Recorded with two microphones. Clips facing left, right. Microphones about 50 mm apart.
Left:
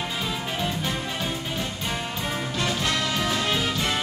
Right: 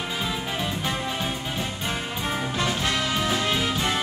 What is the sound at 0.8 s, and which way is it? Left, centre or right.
Music, centre.